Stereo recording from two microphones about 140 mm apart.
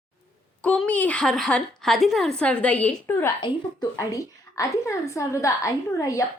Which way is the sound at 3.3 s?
30° left (ahead or behind).